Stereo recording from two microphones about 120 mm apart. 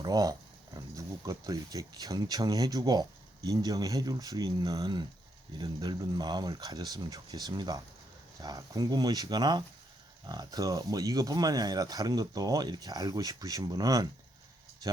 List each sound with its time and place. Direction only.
0.0 s speech: 30° right (ahead or behind)